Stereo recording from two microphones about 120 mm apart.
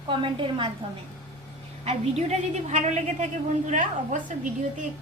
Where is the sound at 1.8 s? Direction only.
65° right (ahead or behind).